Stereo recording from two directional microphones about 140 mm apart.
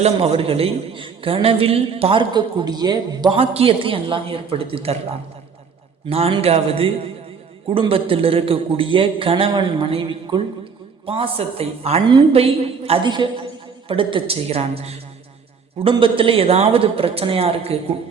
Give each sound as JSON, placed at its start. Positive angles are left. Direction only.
{"t": 0.0, "sound": "a man's voice", "side_deg": -45}
{"t": 3.3, "sound": "a man's voice", "side_deg": -45}
{"t": 6.1, "sound": "a woman's voice", "side_deg": -45}